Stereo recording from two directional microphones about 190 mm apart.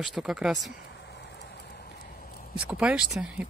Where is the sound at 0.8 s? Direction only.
65° left (ahead or behind).